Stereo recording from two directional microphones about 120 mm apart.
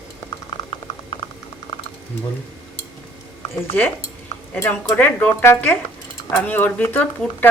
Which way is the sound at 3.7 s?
10° left (ahead or behind).